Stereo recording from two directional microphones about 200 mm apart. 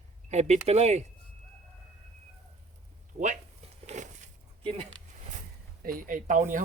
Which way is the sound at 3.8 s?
35° right (ahead or behind).